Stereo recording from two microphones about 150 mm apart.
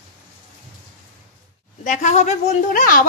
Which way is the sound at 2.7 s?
65° left (ahead or behind).